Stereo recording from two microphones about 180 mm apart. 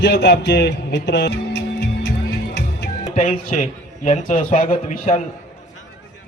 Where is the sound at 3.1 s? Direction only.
45° left (ahead or behind).